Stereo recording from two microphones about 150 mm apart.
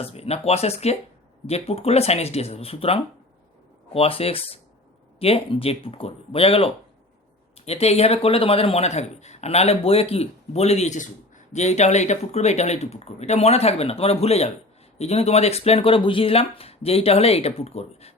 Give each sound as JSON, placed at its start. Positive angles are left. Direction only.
{"t": 0.0, "sound": "speech", "side_deg": 40}